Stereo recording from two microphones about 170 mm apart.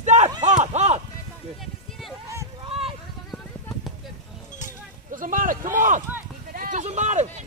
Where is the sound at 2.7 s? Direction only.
35° right (ahead or behind).